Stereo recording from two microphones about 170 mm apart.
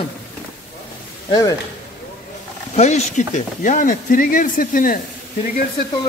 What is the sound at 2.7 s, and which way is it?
Speech, 40° left (ahead or behind).